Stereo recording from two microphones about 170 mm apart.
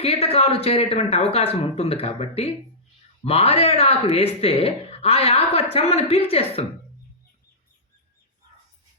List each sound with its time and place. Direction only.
0.0 s speech: 35° left (ahead or behind)